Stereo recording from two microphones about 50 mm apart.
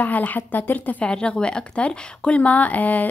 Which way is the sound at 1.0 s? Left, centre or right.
Left.